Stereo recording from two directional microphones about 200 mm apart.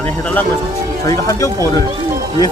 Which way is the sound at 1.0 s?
15° left (ahead or behind).